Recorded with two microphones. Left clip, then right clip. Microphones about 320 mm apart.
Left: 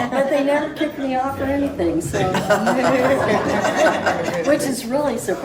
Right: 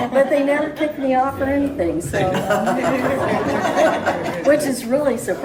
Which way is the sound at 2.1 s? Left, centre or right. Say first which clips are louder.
Even; centre.